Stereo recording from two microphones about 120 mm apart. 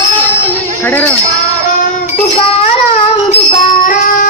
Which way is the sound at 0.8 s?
15° left (ahead or behind).